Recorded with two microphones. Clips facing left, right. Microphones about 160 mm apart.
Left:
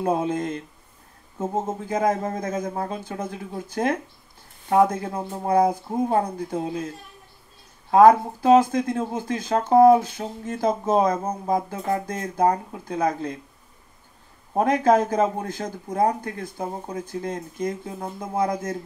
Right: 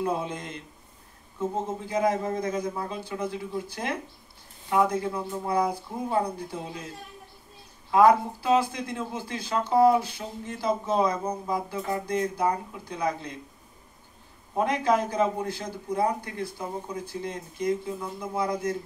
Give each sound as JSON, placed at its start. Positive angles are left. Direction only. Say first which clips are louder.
{"t": 0.0, "sound": "speech", "louder": "left 6 dB", "side_deg": 50}
{"t": 7.9, "sound": "speech", "louder": "left 5 dB", "side_deg": 45}
{"t": 14.6, "sound": "speech", "louder": "left 5 dB", "side_deg": 45}